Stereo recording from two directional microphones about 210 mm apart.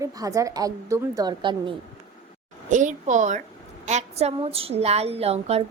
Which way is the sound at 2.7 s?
35° right (ahead or behind).